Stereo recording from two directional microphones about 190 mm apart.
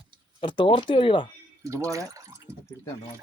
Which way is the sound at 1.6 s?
15° right (ahead or behind).